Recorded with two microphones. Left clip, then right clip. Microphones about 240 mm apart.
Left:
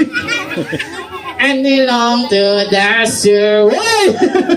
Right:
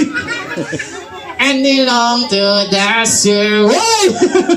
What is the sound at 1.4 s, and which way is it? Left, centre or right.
Music, right.